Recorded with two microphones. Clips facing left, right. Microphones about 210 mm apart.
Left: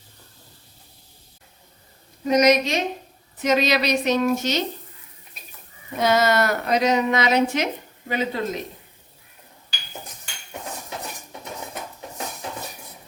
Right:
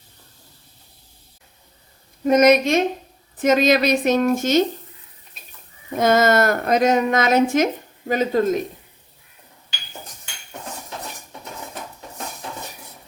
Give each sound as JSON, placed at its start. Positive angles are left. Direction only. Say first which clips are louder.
{"t": 2.2, "sound": "a woman's voice", "louder": "right 3 dB", "side_deg": -50}
{"t": 6.0, "sound": "a woman's voice", "louder": "right 3 dB", "side_deg": -50}